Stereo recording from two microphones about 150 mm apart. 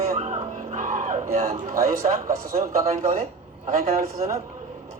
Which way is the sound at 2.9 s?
50° right (ahead or behind).